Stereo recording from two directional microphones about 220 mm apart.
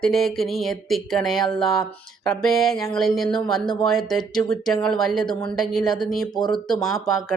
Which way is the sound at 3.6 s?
20° left (ahead or behind).